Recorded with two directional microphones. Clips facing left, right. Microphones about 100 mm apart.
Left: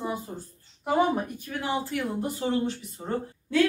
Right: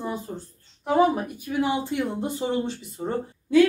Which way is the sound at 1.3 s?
10° right (ahead or behind).